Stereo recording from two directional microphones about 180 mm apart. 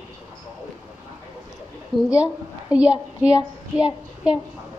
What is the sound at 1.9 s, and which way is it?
A woman's voice, 5° right (ahead or behind).